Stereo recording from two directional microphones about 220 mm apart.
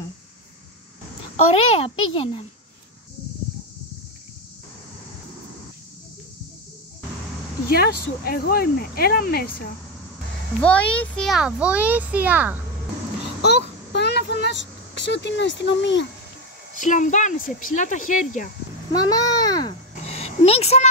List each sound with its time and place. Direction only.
1.7 s a child's voice: 25° left (ahead or behind)
7.7 s speech: 45° left (ahead or behind)
10.6 s a child's voice: 5° left (ahead or behind)
13.4 s vehicle: 50° left (ahead or behind)
16.7 s speech: 35° left (ahead or behind)
18.9 s a child's voice: 15° left (ahead or behind)
20.1 s a sound: 30° left (ahead or behind)